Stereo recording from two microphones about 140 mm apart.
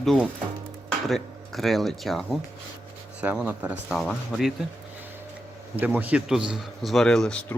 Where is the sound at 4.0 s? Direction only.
Centre (ahead or behind).